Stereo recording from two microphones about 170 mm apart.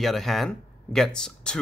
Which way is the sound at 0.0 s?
Centre (ahead or behind).